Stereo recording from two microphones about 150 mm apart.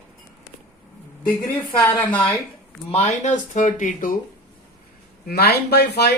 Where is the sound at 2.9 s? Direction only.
50° left (ahead or behind).